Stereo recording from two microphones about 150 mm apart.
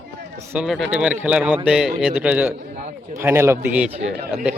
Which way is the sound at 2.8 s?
55° right (ahead or behind).